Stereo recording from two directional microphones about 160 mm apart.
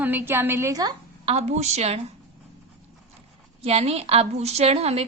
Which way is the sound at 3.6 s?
40° right (ahead or behind).